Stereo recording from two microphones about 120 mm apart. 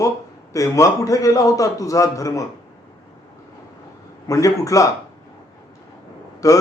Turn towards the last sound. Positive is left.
turn(degrees=30)  # may be behind; listen again after turning